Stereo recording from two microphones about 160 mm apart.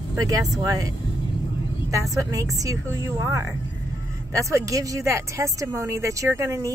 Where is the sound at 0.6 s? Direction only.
20° right (ahead or behind).